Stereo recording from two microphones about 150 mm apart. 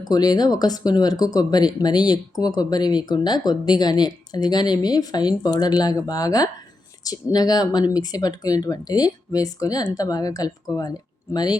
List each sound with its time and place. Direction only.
0.0 s speech: 25° left (ahead or behind)